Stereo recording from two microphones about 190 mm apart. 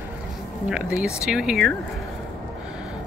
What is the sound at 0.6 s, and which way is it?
Speech, 5° right (ahead or behind).